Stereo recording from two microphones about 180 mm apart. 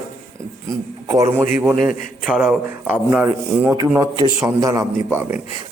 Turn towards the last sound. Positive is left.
turn(degrees=-15)  # may be behind; listen again after turning